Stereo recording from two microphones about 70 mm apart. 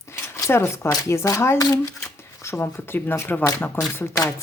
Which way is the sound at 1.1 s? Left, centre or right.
Left.